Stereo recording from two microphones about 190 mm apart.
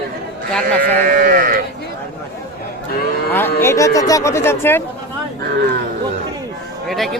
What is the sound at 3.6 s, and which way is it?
Speech, 15° left (ahead or behind).